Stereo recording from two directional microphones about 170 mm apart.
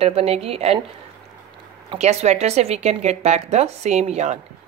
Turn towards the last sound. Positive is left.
turn(degrees=-40)  # may be behind; listen again after turning